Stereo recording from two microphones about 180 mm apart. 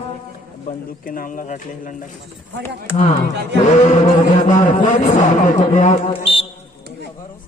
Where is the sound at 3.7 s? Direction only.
40° left (ahead or behind).